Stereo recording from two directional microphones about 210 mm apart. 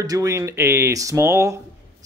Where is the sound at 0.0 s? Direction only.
15° right (ahead or behind).